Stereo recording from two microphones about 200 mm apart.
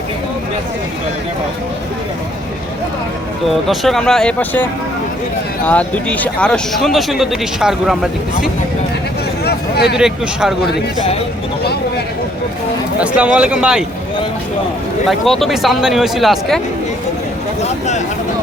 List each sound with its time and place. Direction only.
3.7 s a man's voice: centre (ahead or behind)
5.6 s a man's voice: 5° left (ahead or behind)
9.4 s a sound: 55° left (ahead or behind)
13.0 s a man's voice: 5° right (ahead or behind)
15.2 s a man's voice: centre (ahead or behind)
17.6 s a sound: 35° left (ahead or behind)